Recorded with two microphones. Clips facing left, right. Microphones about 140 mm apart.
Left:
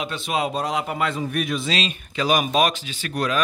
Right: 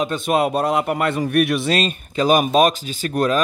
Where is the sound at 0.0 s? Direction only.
50° right (ahead or behind).